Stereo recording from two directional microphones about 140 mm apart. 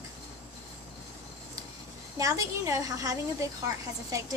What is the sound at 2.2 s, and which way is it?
A woman's voice, 25° right (ahead or behind).